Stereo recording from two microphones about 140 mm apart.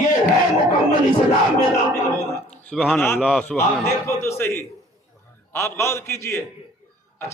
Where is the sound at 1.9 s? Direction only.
20° left (ahead or behind).